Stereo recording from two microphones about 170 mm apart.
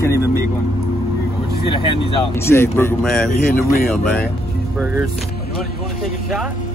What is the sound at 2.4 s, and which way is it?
Speech, 15° left (ahead or behind).